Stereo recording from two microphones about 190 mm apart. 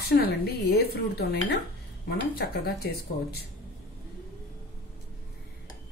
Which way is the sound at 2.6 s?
55° left (ahead or behind).